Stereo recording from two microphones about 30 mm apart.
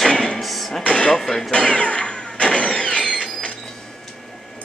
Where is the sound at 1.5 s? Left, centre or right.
Left.